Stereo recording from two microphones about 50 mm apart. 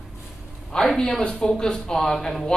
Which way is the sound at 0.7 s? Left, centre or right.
Centre.